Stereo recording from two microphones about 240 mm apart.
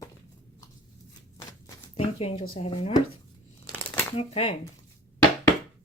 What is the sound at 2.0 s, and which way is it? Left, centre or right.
Speech, left.